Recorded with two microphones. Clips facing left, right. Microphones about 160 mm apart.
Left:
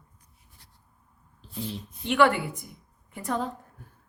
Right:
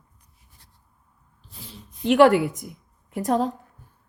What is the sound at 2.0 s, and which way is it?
Speech, 45° right (ahead or behind).